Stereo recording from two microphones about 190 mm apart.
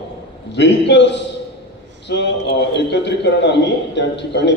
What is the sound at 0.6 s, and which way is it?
A man's voice, 65° left (ahead or behind).